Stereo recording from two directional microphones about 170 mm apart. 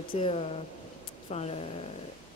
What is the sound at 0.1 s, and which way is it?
Speech, 35° left (ahead or behind).